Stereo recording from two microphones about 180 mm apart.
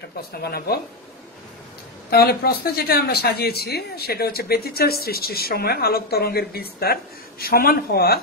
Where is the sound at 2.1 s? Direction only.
60° left (ahead or behind).